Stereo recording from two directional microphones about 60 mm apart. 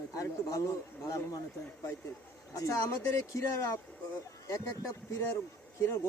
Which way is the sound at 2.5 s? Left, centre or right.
Left.